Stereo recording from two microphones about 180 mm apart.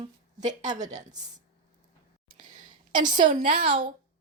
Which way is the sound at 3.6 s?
30° right (ahead or behind).